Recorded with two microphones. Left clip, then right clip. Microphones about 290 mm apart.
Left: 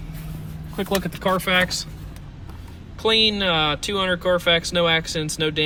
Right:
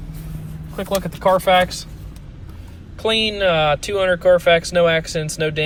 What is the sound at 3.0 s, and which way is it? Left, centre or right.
Speech, centre.